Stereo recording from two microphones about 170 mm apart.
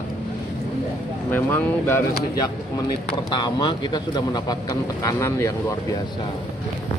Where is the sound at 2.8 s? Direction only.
25° left (ahead or behind).